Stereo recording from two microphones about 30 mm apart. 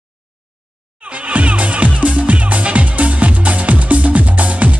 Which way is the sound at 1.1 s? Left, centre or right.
Right.